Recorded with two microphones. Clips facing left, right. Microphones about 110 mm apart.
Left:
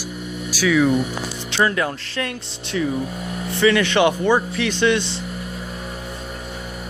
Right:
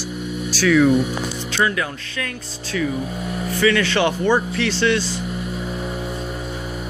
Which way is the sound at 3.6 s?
20° left (ahead or behind).